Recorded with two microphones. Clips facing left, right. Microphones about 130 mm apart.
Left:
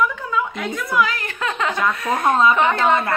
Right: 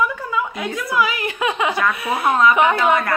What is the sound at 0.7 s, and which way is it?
A woman's voice, 5° right (ahead or behind).